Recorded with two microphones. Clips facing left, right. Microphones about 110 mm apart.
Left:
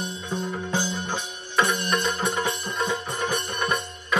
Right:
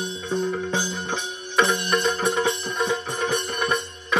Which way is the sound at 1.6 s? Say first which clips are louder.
Right 3 dB; 20° right (ahead or behind).